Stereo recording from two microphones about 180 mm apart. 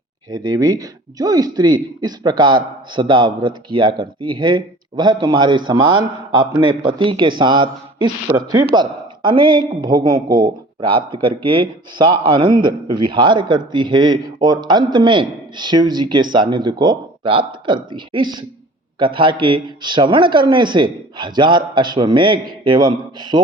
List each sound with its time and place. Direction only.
0.3 s speech: 20° right (ahead or behind)